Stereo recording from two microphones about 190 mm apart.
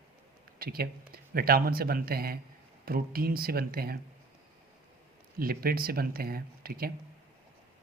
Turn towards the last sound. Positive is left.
turn(degrees=-50)  # may be behind; listen again after turning